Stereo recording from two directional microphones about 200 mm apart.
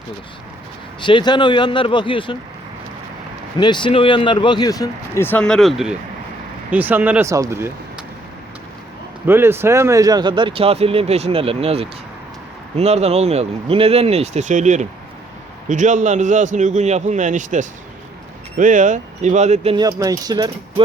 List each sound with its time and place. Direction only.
1.0 s speech: 25° left (ahead or behind)
3.6 s speech: 25° left (ahead or behind); by 7.7 s 15° right (ahead or behind)
9.2 s speech: 10° right (ahead or behind); by 19.7 s 35° right (ahead or behind)
20.0 s speech: 20° right (ahead or behind)